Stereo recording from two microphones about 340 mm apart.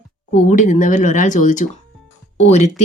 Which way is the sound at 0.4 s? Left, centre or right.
Left.